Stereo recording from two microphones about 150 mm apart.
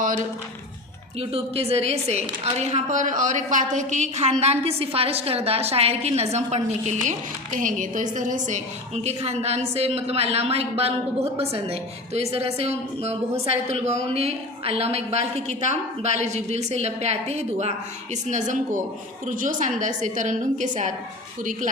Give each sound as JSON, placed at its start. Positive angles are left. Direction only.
{"t": 1.2, "sound": "a woman's voice", "side_deg": -40}
{"t": 9.0, "sound": "a woman's voice", "side_deg": -45}